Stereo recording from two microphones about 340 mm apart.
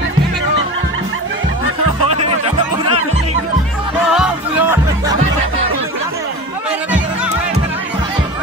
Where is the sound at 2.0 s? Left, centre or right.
Centre.